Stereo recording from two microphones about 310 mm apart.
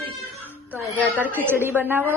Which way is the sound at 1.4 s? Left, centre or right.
Centre.